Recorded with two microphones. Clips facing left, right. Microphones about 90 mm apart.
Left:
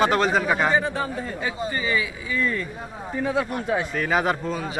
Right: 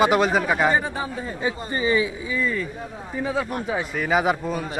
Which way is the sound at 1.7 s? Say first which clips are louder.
Right 5 dB; 25° right (ahead or behind).